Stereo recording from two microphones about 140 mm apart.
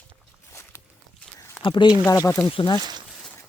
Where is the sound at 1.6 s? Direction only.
35° left (ahead or behind).